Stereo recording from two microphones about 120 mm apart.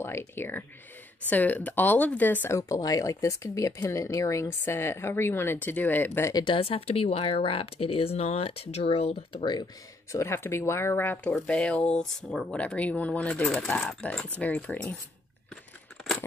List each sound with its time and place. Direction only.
0.4 s speech: 15° left (ahead or behind)
6.3 s speech: 45° left (ahead or behind)
9.4 s speech: 40° left (ahead or behind)
10.1 s speech: 20° left (ahead or behind)
15.5 s a sound: centre (ahead or behind)